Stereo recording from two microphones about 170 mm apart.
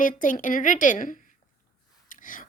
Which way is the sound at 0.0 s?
50° left (ahead or behind).